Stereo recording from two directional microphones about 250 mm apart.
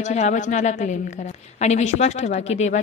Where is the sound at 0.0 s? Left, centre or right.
Left.